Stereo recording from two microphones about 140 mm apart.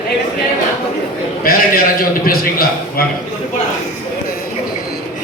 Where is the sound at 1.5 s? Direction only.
90° left.